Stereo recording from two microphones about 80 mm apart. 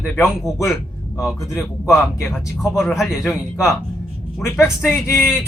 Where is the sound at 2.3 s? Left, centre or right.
Centre.